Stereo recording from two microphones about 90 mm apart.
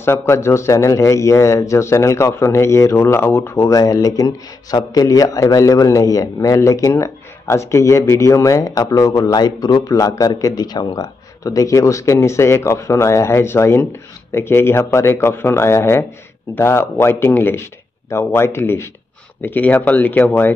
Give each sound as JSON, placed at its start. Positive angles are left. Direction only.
{"t": 0.0, "sound": "speech", "side_deg": 30}